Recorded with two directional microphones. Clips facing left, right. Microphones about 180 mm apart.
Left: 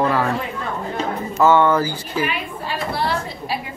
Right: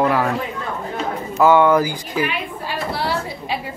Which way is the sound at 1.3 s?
10° right (ahead or behind).